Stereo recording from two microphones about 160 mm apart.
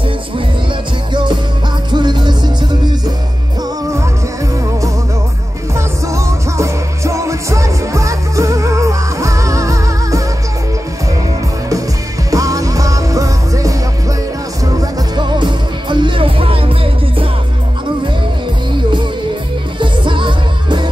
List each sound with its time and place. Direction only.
1.1 s music: 30° right (ahead or behind)
5.8 s music: 20° right (ahead or behind)
12.3 s music: 20° right (ahead or behind)
19.8 s music: 30° right (ahead or behind)